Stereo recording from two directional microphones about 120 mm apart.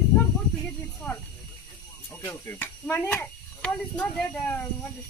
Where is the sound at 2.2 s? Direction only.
20° left (ahead or behind).